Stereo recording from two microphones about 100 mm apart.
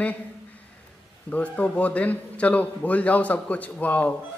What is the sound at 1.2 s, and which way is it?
A man's voice, 15° left (ahead or behind).